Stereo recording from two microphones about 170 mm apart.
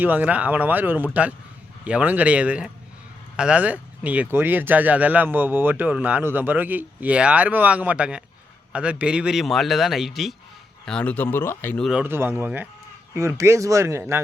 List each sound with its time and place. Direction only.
0.0 s speech: 10° right (ahead or behind); by 11.9 s 10° left (ahead or behind)
11.9 s speech: 10° right (ahead or behind)